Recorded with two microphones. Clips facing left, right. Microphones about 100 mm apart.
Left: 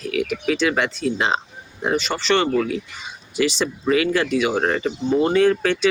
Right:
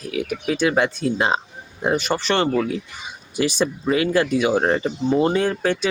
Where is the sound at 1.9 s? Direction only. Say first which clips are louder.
Right 1 dB; 50° right (ahead or behind).